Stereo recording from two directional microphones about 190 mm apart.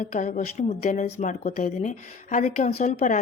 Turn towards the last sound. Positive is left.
turn(degrees=40)  # may be behind; listen again after turning